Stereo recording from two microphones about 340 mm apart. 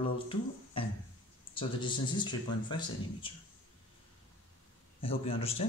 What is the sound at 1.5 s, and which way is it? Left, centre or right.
Speech, centre.